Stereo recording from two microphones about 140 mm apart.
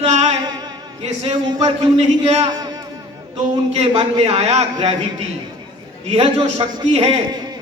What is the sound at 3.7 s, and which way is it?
Speech, 50° right (ahead or behind).